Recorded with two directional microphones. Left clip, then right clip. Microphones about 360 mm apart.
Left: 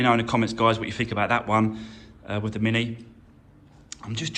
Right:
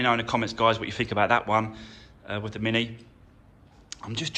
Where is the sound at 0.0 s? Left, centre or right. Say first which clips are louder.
Left 2 dB; centre.